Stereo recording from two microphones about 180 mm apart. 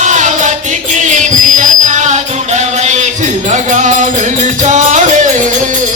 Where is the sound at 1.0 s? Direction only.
45° right (ahead or behind).